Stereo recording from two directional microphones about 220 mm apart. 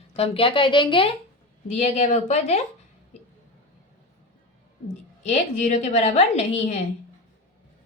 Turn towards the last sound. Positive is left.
turn(degrees=30)  # may be behind; listen again after turning